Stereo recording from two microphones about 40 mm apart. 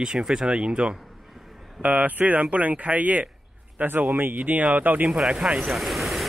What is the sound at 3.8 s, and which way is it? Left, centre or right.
Speech, right.